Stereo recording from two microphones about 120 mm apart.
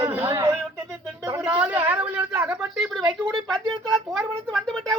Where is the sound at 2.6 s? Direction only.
Centre (ahead or behind).